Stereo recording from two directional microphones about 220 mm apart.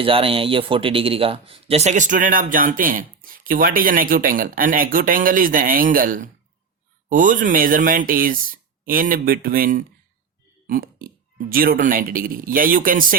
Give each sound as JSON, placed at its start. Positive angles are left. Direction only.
{"t": 0.0, "sound": "speech", "side_deg": -25}